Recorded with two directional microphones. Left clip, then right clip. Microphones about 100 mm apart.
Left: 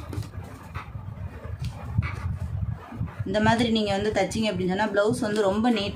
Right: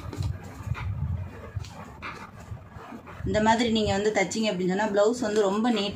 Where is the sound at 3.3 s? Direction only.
45° left (ahead or behind).